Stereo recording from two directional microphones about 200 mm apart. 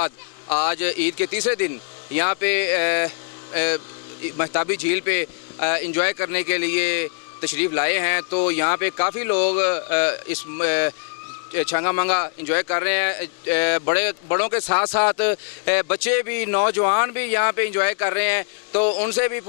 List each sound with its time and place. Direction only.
0.5 s speech: 15° left (ahead or behind)